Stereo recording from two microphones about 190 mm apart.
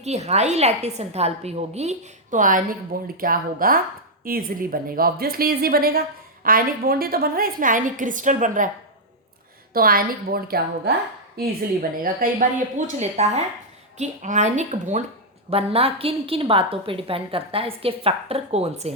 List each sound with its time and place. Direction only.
0.0 s a woman's voice: 35° right (ahead or behind)
9.7 s a woman's voice: 50° right (ahead or behind)
13.0 s a woman's voice: 35° right (ahead or behind)